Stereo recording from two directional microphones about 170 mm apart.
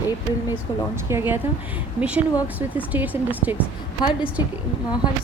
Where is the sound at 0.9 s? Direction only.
15° right (ahead or behind).